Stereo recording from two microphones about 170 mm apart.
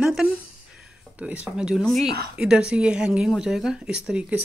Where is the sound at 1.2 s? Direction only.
5° right (ahead or behind).